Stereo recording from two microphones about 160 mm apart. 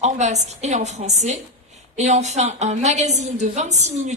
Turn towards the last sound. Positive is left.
turn(degrees=-45)  # may be behind; listen again after turning